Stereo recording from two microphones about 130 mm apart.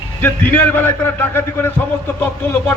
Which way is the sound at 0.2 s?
15° left (ahead or behind).